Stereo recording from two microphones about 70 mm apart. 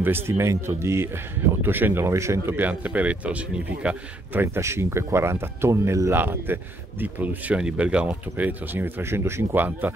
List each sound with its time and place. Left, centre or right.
0.0 s speech: right
2.7 s speech: right
4.6 s speech: right
6.1 s speech: right; by 8.1 s centre
8.1 s speech: right